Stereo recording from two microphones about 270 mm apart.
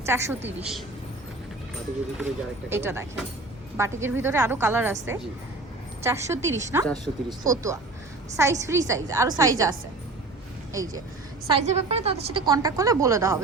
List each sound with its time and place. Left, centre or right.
0.0 s a woman's voice: centre
2.1 s a woman's voice: centre
6.8 s speech: centre
7.3 s a woman's voice: centre
10.7 s speech: centre
11.5 s a woman's voice: right